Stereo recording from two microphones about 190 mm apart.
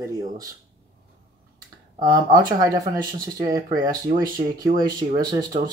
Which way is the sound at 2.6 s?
20° right (ahead or behind).